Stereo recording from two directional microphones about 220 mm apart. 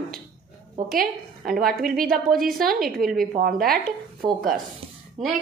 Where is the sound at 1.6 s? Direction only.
40° right (ahead or behind).